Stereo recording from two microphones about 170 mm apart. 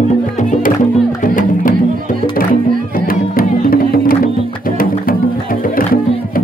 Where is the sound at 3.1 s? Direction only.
60° left (ahead or behind).